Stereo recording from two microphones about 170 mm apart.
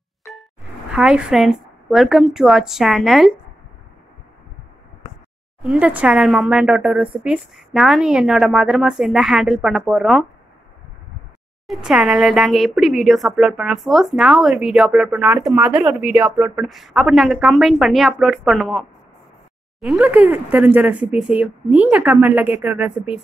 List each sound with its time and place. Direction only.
0.3 s music: centre (ahead or behind)
0.9 s speech: 5° right (ahead or behind)
5.6 s speech: 5° right (ahead or behind)
11.6 s speech: centre (ahead or behind)